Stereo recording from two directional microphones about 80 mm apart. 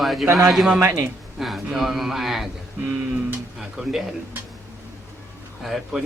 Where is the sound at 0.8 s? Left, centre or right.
Right.